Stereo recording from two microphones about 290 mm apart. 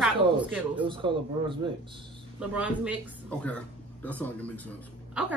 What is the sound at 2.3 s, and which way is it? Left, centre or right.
A woman's voice, centre.